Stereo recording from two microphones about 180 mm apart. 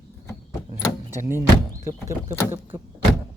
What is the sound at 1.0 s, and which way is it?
Speech, 15° right (ahead or behind).